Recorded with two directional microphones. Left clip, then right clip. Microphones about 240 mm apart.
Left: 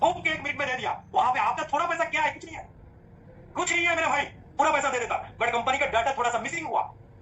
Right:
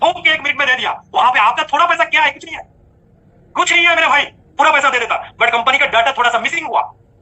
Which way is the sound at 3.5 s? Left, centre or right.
Centre.